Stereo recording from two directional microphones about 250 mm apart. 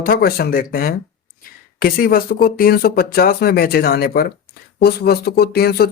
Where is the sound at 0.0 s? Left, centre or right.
Left.